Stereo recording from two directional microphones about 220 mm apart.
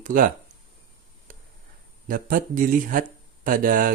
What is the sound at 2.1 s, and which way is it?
Speech, 40° right (ahead or behind).